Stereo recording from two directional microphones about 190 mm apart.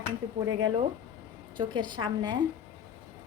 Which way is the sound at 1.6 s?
25° right (ahead or behind).